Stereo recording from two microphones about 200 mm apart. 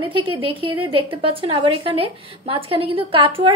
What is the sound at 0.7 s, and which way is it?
A woman's voice, 25° right (ahead or behind).